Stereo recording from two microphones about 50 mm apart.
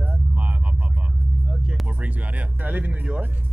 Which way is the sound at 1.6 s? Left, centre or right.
Right.